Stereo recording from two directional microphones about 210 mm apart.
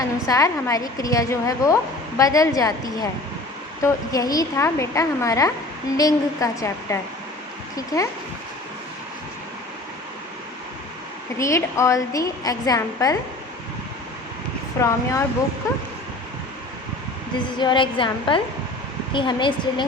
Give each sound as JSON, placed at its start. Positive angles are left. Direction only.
{"t": 0.0, "sound": "a woman's voice", "side_deg": 15}
{"t": 11.3, "sound": "a woman's voice", "side_deg": 15}
{"t": 14.8, "sound": "a woman's voice", "side_deg": 15}
{"t": 17.6, "sound": "a woman's voice", "side_deg": 20}